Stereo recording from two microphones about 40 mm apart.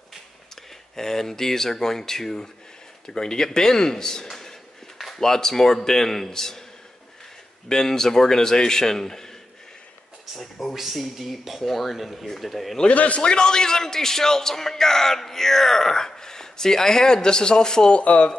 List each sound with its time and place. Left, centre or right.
0.9 s a man's voice: centre
4.9 s a sound: centre
5.2 s a man's voice: centre
7.6 s a man's voice: centre
10.3 s speech: centre
12.9 s speech: left
13.2 s a man's voice: left
18.0 s speech: left